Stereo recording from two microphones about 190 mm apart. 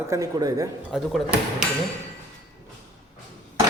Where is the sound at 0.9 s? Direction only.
Centre (ahead or behind).